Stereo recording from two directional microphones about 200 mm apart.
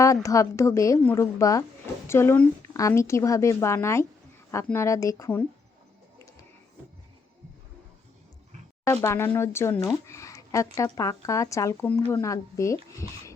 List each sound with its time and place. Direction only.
0.0 s speech: 15° left (ahead or behind)
8.8 s speech: 15° left (ahead or behind)